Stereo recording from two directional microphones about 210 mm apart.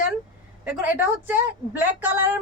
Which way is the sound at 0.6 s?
5° right (ahead or behind).